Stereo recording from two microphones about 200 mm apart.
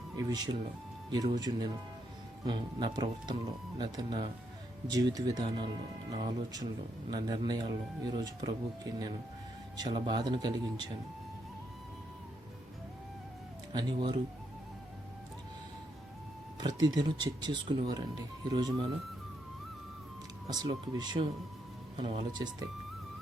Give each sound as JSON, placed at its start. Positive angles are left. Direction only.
{"t": 0.2, "sound": "speech", "side_deg": -20}
{"t": 13.7, "sound": "speech", "side_deg": -20}
{"t": 16.6, "sound": "speech", "side_deg": -20}
{"t": 20.5, "sound": "speech", "side_deg": -20}